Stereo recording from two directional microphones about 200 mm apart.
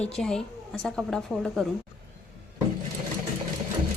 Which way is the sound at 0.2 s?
5° left (ahead or behind).